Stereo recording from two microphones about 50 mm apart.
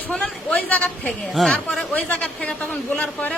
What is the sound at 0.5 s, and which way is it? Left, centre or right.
Speech, left.